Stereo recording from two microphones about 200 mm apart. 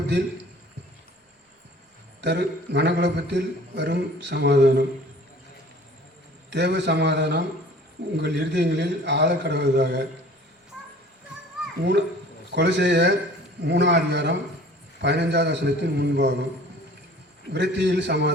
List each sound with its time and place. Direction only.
2.2 s a man's voice: 60° right (ahead or behind)
6.5 s a man's voice: 60° right (ahead or behind)
11.8 s a man's voice: 60° right (ahead or behind)
17.5 s a man's voice: 60° right (ahead or behind)